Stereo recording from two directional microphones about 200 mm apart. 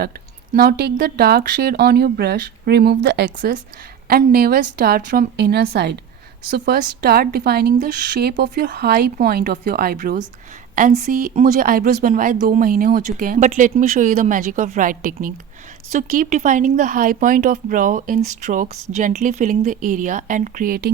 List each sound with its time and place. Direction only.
0.5 s speech: 50° right (ahead or behind)
4.1 s speech: 50° right (ahead or behind)